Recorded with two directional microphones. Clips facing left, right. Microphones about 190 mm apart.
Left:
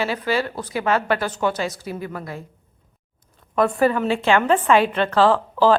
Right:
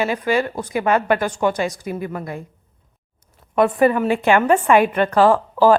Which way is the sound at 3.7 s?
20° right (ahead or behind).